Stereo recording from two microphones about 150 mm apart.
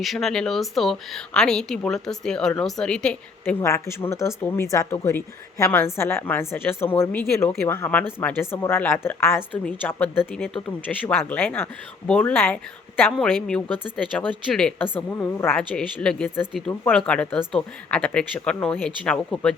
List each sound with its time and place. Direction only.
0.0 s speech: centre (ahead or behind)